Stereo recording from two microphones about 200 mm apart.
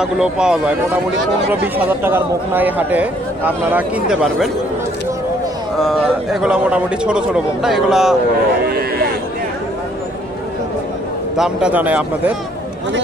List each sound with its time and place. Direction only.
0.0 s a man's voice: 5° right (ahead or behind)
1.9 s speech: 10° right (ahead or behind)
5.8 s a man's voice: centre (ahead or behind)
8.6 s a sound: 50° right (ahead or behind)
11.3 s speech: 5° right (ahead or behind)